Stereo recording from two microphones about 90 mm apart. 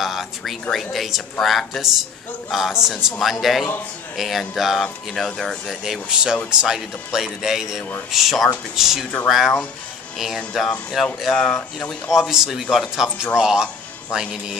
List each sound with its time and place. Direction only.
0.0 s speech: centre (ahead or behind)
10.1 s speech: centre (ahead or behind)
12.1 s speech: 5° right (ahead or behind)